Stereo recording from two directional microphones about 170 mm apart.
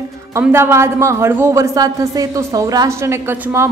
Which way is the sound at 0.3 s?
15° right (ahead or behind).